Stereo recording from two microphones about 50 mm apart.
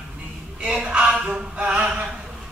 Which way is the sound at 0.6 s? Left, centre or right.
Centre.